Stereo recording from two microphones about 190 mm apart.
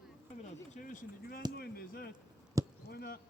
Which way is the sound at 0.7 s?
45° left (ahead or behind).